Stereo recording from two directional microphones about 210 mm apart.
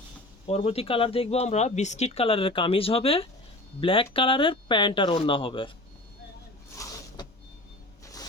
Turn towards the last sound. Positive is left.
turn(degrees=15)  # may be behind; listen again after turning